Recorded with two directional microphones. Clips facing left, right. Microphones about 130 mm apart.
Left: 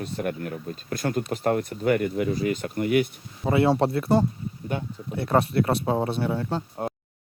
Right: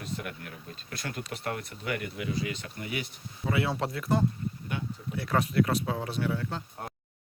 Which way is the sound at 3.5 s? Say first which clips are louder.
Left 9 dB; 35° left (ahead or behind).